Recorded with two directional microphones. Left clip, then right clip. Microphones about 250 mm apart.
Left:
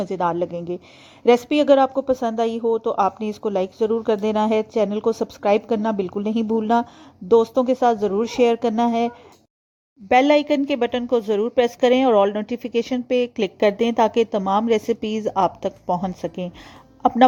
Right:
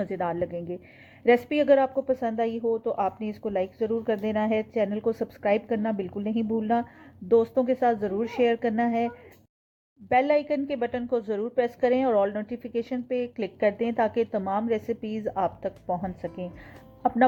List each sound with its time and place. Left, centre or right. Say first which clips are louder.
0.0 s a woman's voice: left 6 dB; left
10.1 s a woman's voice: left 7 dB; left